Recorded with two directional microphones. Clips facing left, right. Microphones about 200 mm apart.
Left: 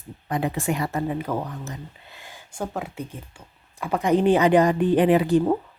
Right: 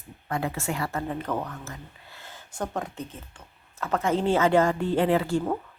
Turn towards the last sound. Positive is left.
turn(degrees=15)  # may be behind; listen again after turning